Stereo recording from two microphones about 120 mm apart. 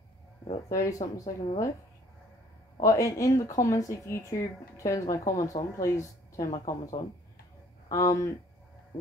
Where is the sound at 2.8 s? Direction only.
30° left (ahead or behind).